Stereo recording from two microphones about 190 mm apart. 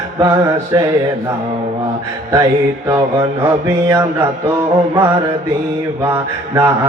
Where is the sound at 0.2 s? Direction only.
15° right (ahead or behind).